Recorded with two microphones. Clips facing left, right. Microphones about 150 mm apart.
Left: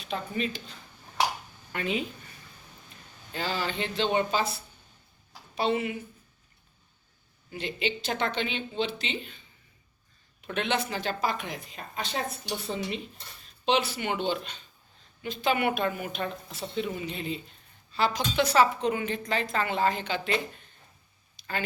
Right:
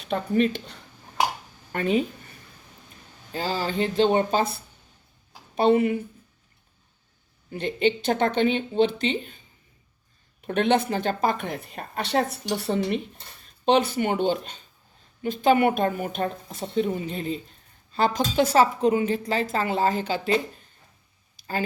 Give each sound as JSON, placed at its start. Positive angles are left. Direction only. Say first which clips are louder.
{"t": 0.1, "sound": "speech", "louder": "right 9 dB", "side_deg": -55}
{"t": 1.7, "sound": "a woman's voice", "louder": "right 7 dB", "side_deg": -45}
{"t": 3.3, "sound": "a woman's voice", "louder": "right 5 dB", "side_deg": -40}
{"t": 7.6, "sound": "a woman's voice", "louder": "right 8 dB", "side_deg": -50}
{"t": 10.4, "sound": "a woman's voice", "louder": "right 8 dB", "side_deg": -50}
{"t": 13.7, "sound": "a woman's voice", "louder": "right 6 dB", "side_deg": -50}